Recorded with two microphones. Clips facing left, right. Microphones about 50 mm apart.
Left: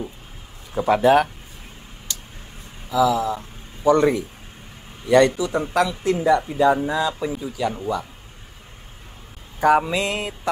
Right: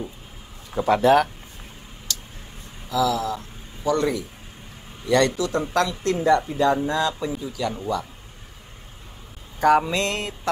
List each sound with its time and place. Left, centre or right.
0.7 s speech: centre
2.1 s a sound: left
2.9 s speech: centre
5.0 s speech: centre
9.6 s speech: centre